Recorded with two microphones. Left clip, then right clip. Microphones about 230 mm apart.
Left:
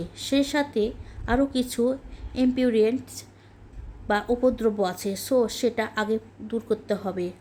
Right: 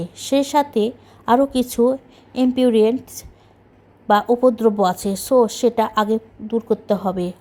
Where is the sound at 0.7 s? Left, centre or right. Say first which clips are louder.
Right 6 dB; centre.